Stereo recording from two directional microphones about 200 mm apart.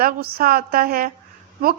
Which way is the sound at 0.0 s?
50° right (ahead or behind).